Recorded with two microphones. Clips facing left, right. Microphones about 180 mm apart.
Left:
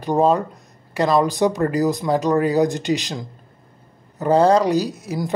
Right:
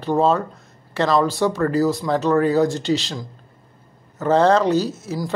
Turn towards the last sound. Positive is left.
turn(degrees=15)  # may be behind; listen again after turning